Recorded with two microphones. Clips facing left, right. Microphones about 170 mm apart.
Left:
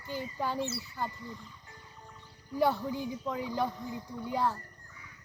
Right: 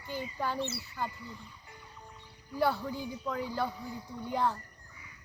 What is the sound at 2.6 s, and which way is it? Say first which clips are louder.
A woman's voice: left 2 dB; 20° left (ahead or behind).